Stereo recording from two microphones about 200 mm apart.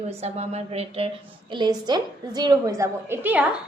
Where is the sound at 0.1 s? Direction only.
30° right (ahead or behind).